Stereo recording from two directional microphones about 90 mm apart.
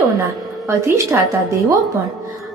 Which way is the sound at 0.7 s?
35° right (ahead or behind).